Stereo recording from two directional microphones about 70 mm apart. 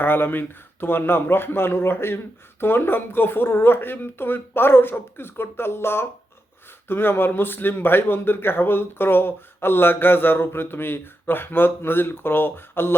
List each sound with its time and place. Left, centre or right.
0.0 s speech: left